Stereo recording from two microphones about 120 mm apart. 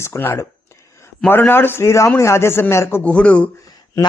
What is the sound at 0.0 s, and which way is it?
Speech, 20° left (ahead or behind).